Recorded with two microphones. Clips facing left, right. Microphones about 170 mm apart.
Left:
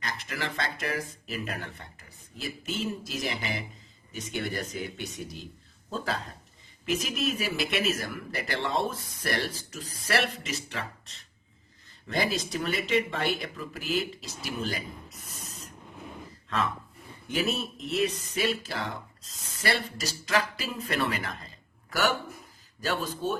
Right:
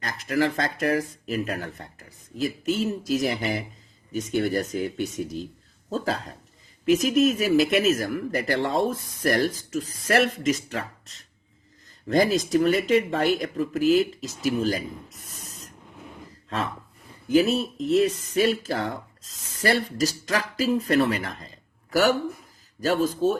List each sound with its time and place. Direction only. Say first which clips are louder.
0.0 s speech: right 11 dB; 45° right (ahead or behind)
17.3 s speech: right 9 dB; 35° right (ahead or behind)